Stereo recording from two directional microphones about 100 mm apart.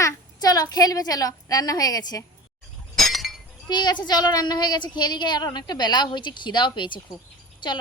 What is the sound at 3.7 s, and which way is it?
A woman's voice, 45° left (ahead or behind).